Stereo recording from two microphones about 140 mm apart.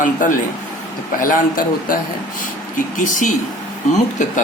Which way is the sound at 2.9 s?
70° left (ahead or behind).